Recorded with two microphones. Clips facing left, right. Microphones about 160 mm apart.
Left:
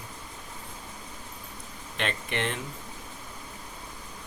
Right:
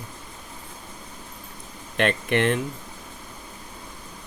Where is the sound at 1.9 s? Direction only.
55° right (ahead or behind).